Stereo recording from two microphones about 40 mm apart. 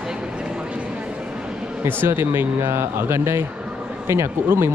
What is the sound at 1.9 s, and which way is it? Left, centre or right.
Speech, right.